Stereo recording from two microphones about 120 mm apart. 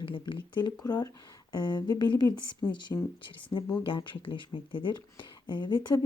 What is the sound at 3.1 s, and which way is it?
Speech, 45° left (ahead or behind).